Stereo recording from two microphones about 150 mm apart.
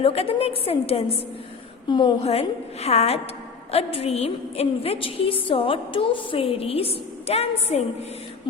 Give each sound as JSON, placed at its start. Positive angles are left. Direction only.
{"t": 0.0, "sound": "a woman's voice", "side_deg": 40}
{"t": 1.9, "sound": "a woman's voice", "side_deg": 30}
{"t": 2.2, "sound": "a woman's voice", "side_deg": 45}